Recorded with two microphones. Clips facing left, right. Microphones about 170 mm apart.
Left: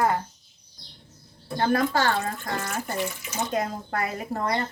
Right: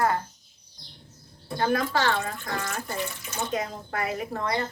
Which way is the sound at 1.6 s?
45° left (ahead or behind).